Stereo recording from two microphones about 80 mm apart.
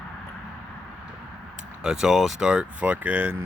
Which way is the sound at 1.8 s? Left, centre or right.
Centre.